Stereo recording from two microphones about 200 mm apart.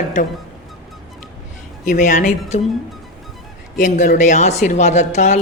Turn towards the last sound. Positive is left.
turn(degrees=35)  # may be behind; listen again after turning